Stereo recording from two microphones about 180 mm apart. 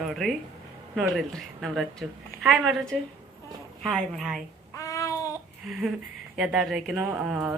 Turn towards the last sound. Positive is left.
turn(degrees=-5)  # may be behind; listen again after turning